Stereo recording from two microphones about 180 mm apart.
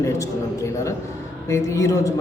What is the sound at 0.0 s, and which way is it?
A man's voice, 15° left (ahead or behind).